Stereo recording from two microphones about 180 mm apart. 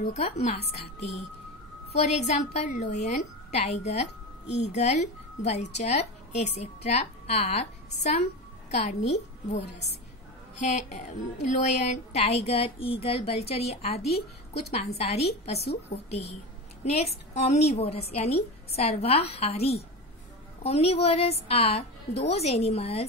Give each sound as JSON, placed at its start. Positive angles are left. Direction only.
{"t": 0.0, "sound": "speech", "side_deg": 40}
{"t": 2.0, "sound": "a woman's voice", "side_deg": 40}
{"t": 10.6, "sound": "speech", "side_deg": 40}
{"t": 15.6, "sound": "a woman's voice", "side_deg": 65}
{"t": 16.1, "sound": "speech", "side_deg": 35}